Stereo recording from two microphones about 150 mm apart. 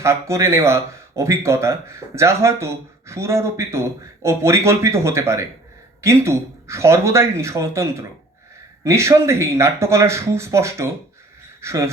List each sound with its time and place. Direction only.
0.0 s speech: 20° right (ahead or behind)